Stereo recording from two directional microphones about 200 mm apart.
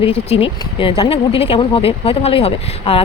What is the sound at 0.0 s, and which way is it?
A woman's voice, 30° left (ahead or behind).